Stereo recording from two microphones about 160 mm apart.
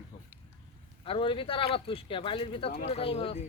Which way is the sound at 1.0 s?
35° left (ahead or behind).